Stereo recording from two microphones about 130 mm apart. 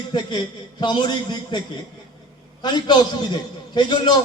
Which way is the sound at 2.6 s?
35° left (ahead or behind).